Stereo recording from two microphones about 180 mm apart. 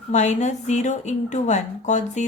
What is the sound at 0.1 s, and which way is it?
A woman's voice, 40° left (ahead or behind).